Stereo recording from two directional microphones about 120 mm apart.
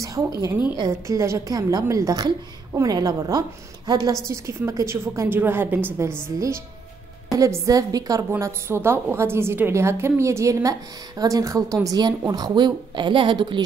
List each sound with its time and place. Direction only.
0.0 s a woman's voice: 30° right (ahead or behind)
7.3 s a woman's voice: 25° right (ahead or behind)